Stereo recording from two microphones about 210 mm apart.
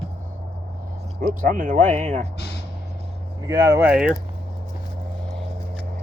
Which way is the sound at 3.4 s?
15° right (ahead or behind).